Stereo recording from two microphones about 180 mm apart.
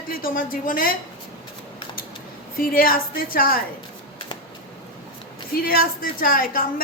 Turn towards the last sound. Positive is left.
turn(degrees=50)  # may be behind; listen again after turning